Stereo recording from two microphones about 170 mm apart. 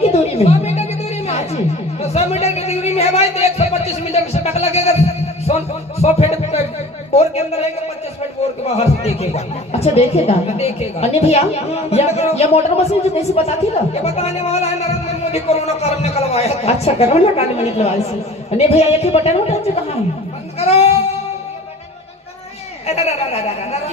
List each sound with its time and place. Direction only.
0.0 s a sound: 35° left (ahead or behind)
2.0 s speech: 40° left (ahead or behind)
3.3 s a sound: 40° left (ahead or behind)
6.0 s speech: 40° left (ahead or behind)
20.6 s goat: 40° left (ahead or behind)
22.9 s speech: 35° left (ahead or behind)